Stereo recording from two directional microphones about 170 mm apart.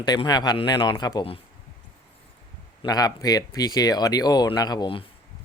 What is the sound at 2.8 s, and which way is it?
Speech, 20° left (ahead or behind).